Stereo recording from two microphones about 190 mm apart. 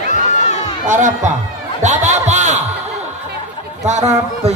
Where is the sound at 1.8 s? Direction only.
40° right (ahead or behind).